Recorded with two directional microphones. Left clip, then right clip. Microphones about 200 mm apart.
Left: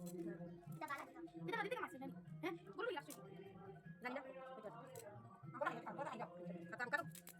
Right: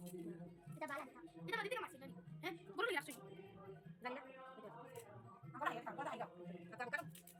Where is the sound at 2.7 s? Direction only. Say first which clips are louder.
Right 7 dB; 10° right (ahead or behind).